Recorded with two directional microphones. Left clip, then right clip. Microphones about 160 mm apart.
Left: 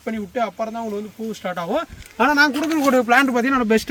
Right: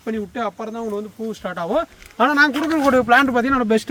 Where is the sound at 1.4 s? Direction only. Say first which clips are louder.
Right 2 dB; 35° left (ahead or behind).